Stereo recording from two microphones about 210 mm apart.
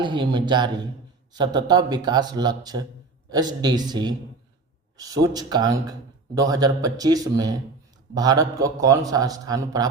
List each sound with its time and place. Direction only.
0.0 s a man's voice: 20° right (ahead or behind)